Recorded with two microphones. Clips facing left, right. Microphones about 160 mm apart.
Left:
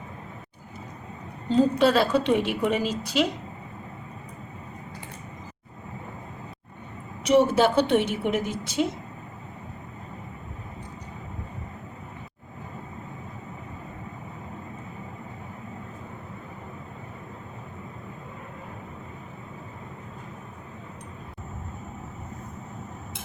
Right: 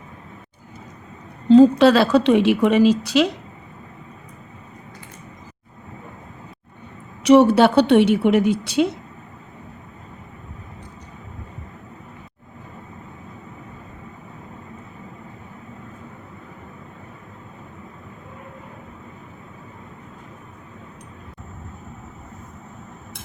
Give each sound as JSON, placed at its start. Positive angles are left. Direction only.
{"t": 1.5, "sound": "a woman's voice", "side_deg": -85}
{"t": 7.3, "sound": "a woman's voice", "side_deg": -70}